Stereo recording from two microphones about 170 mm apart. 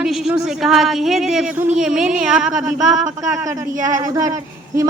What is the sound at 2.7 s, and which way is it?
Speech, 20° right (ahead or behind).